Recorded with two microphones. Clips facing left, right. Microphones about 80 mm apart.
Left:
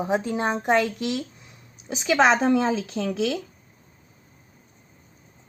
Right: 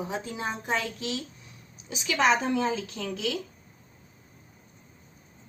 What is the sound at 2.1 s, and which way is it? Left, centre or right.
Speech, left.